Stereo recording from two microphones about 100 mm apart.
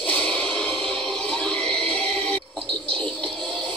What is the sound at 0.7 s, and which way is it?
Music, 10° left (ahead or behind).